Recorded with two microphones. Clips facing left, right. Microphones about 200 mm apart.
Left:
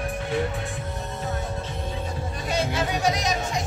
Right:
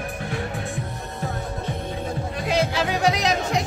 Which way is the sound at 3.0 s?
65° right (ahead or behind).